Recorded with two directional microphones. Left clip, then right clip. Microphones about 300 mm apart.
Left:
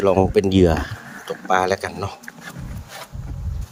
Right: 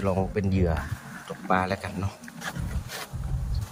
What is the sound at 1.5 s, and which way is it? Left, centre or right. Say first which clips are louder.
Speech: left 7 dB; left.